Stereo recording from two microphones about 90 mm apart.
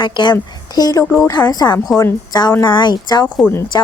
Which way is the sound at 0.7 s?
45° left (ahead or behind).